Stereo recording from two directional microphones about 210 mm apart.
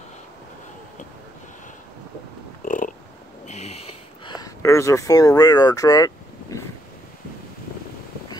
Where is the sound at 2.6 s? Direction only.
40° left (ahead or behind).